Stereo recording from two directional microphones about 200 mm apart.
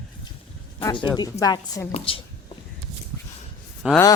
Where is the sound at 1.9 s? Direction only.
30° left (ahead or behind).